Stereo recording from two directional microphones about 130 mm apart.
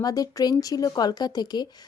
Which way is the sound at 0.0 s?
30° left (ahead or behind).